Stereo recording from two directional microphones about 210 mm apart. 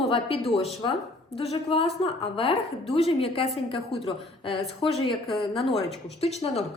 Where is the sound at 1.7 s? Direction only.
25° left (ahead or behind).